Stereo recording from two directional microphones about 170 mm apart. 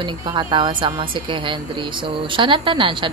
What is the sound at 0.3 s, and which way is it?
A woman's voice, 25° right (ahead or behind).